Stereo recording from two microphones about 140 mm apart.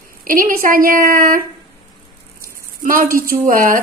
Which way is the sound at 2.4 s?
90° right.